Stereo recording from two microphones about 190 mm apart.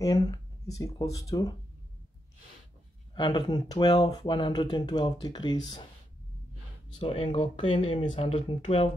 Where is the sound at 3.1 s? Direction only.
25° left (ahead or behind).